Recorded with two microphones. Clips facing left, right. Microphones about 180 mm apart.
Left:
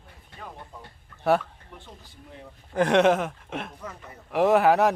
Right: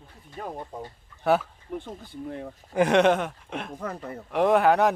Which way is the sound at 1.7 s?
55° right (ahead or behind).